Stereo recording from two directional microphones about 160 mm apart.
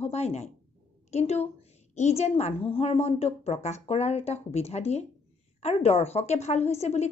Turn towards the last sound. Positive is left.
turn(degrees=40)  # may be behind; listen again after turning